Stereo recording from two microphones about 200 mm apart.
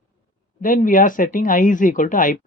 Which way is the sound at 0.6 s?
40° left (ahead or behind).